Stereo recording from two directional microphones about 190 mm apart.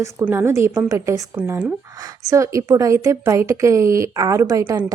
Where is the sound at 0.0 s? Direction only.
15° right (ahead or behind).